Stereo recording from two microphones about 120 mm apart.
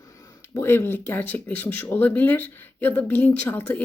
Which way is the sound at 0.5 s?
20° left (ahead or behind).